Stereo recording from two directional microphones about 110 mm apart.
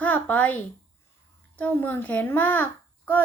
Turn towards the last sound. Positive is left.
turn(degrees=15)  # may be behind; listen again after turning